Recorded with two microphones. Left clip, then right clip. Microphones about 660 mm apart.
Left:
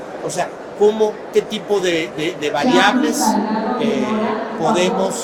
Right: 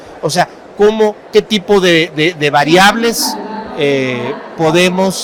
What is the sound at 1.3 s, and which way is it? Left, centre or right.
Speech, right.